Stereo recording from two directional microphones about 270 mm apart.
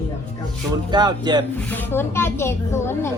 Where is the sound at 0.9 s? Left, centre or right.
Centre.